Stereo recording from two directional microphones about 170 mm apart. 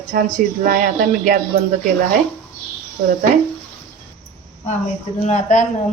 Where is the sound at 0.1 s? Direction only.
55° right (ahead or behind).